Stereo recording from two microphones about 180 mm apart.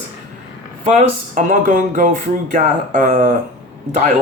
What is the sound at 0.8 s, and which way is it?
Speech, 45° right (ahead or behind).